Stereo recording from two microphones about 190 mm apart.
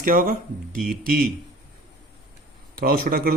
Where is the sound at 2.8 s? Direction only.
50° right (ahead or behind).